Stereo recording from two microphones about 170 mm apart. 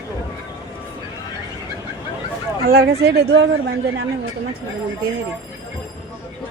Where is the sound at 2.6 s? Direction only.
65° right (ahead or behind).